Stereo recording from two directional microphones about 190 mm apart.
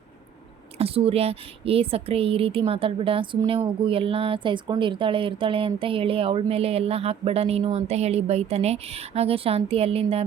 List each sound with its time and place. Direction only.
0.8 s a woman's voice: 30° right (ahead or behind)